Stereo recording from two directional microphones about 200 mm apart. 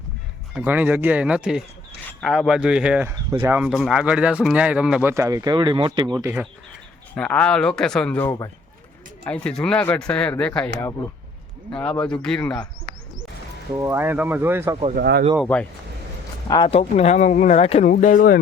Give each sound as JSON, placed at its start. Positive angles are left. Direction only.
{"t": 0.5, "sound": "speech", "side_deg": -10}
{"t": 5.1, "sound": "speech", "side_deg": -15}
{"t": 7.2, "sound": "speech", "side_deg": 5}
{"t": 11.7, "sound": "speech", "side_deg": 5}
{"t": 13.7, "sound": "speech", "side_deg": -10}
{"t": 14.9, "sound": "speech", "side_deg": -55}
{"t": 16.5, "sound": "speech", "side_deg": 25}
{"t": 17.9, "sound": "speech", "side_deg": 40}